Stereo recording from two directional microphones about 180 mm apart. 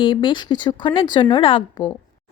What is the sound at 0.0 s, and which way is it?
A woman's voice, 25° left (ahead or behind).